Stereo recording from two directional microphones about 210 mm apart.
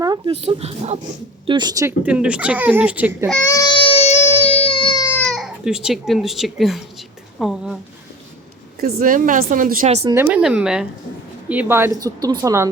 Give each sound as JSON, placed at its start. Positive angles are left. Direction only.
{"t": 0.3, "sound": "speech", "side_deg": -30}
{"t": 3.2, "sound": "speech", "side_deg": 5}
{"t": 3.5, "sound": "baby cry", "side_deg": 20}
{"t": 5.2, "sound": "speech", "side_deg": 0}
{"t": 8.8, "sound": "speech", "side_deg": -45}
{"t": 10.3, "sound": "speech", "side_deg": -5}